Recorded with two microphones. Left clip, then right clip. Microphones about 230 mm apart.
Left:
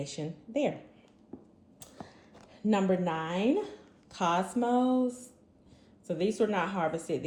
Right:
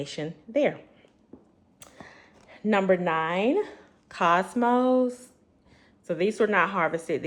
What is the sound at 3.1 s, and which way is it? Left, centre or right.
Speech, right.